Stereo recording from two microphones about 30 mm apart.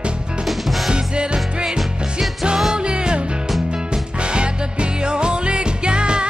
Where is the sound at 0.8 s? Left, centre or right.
Right.